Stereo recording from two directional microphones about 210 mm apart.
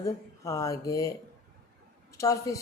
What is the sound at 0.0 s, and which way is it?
A woman's voice, 15° left (ahead or behind).